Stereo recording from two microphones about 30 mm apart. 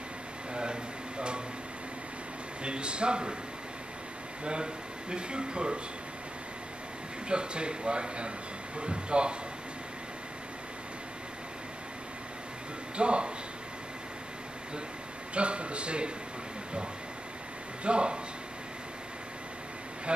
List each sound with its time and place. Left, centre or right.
0.6 s a sound: right
2.6 s speech: right
5.1 s speech: right
7.2 s speech: right
12.9 s speech: right
15.3 s speech: right
17.8 s speech: right
20.1 s speech: right